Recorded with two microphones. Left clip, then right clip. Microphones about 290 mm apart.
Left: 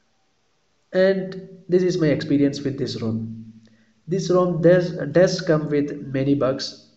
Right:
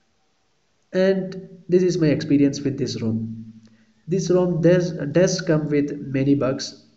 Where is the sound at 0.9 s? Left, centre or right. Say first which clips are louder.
Left 1 dB; left.